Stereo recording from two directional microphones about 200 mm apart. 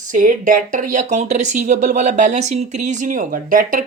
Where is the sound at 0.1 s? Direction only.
40° right (ahead or behind).